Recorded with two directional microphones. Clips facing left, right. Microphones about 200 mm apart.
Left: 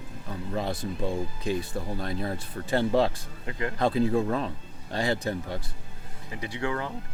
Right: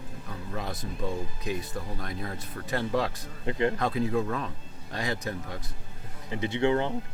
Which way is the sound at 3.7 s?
30° left (ahead or behind).